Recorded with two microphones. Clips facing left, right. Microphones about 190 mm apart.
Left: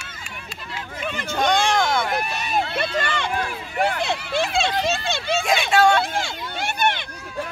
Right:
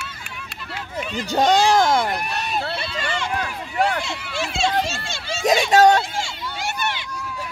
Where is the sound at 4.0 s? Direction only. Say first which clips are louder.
Left 4 dB; 60° left (ahead or behind).